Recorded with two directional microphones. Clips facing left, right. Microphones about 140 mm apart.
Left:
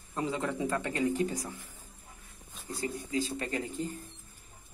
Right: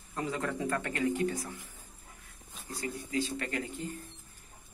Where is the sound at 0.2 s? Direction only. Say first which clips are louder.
Left 2 dB; 20° left (ahead or behind).